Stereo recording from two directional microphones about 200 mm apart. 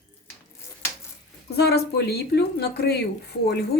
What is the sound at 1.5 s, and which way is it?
A woman's voice, 55° left (ahead or behind).